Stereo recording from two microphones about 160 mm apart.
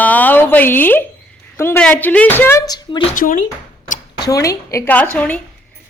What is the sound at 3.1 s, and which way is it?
Speech, 55° left (ahead or behind).